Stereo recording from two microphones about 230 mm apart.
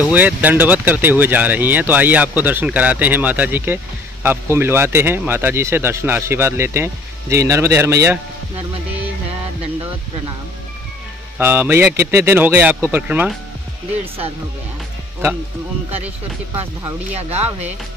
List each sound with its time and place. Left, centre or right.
0.0 s speech: centre
11.3 s speech: centre
17.1 s speech: right